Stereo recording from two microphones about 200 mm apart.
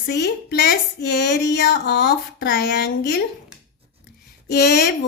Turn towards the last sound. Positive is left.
turn(degrees=55)  # may be behind; listen again after turning